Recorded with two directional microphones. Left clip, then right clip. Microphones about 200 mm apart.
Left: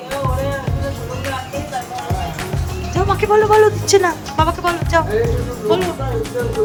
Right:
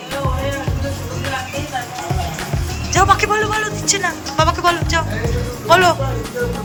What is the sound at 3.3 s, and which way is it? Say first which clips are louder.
Music: left 7 dB; 20° left (ahead or behind).